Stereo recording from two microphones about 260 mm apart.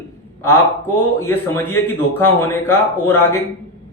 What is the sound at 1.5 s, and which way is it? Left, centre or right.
A man's voice, centre.